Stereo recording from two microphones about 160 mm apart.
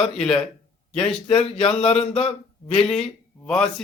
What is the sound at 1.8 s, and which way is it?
Speech, 40° left (ahead or behind).